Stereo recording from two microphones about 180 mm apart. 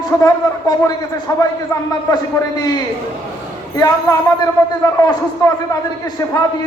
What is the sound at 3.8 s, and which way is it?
Speech, 20° left (ahead or behind).